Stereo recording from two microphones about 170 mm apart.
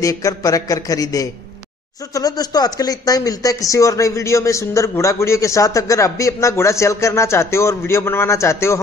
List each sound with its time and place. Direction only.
0.0 s speech: 20° left (ahead or behind)